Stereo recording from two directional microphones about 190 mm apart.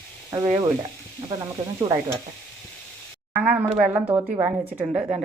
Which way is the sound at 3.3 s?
10° right (ahead or behind).